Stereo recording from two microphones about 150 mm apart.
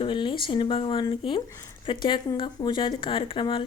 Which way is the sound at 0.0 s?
35° left (ahead or behind).